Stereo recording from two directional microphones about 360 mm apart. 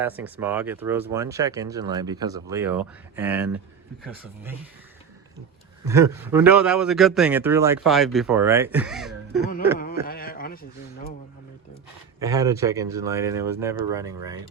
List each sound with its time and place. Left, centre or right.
0.0 s speech: centre
5.8 s a man's voice: centre
9.7 s a sound: left
12.2 s speech: centre